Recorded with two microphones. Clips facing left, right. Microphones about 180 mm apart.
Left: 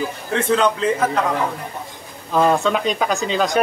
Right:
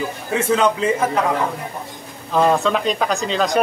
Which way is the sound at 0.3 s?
5° right (ahead or behind).